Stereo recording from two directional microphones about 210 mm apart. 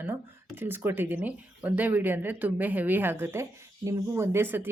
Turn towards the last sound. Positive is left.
turn(degrees=-10)  # may be behind; listen again after turning